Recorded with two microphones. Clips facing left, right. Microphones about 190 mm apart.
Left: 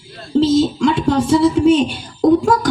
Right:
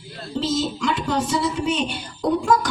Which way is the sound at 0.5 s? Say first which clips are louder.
Left 9 dB; 50° left (ahead or behind).